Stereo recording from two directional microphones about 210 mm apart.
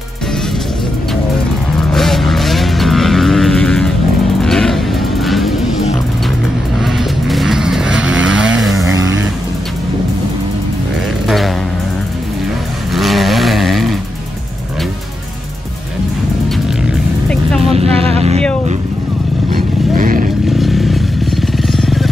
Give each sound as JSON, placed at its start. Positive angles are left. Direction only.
{"t": 1.9, "sound": "vehicle", "side_deg": 0}
{"t": 4.4, "sound": "music", "side_deg": 0}
{"t": 6.8, "sound": "vehicle", "side_deg": 0}
{"t": 11.2, "sound": "vehicle", "side_deg": 0}
{"t": 12.9, "sound": "vehicle", "side_deg": 0}
{"t": 17.3, "sound": "vehicle", "side_deg": 5}
{"t": 17.7, "sound": "vehicle", "side_deg": -30}
{"t": 20.0, "sound": "roaring cats", "side_deg": -40}
{"t": 20.4, "sound": "vehicle", "side_deg": 0}